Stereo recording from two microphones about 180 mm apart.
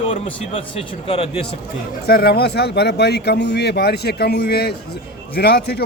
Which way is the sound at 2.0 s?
60° left (ahead or behind).